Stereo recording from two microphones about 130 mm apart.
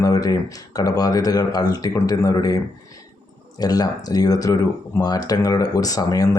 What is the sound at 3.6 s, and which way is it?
Speech, 30° left (ahead or behind).